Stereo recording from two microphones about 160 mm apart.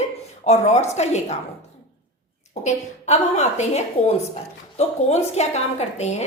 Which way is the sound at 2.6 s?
45° left (ahead or behind).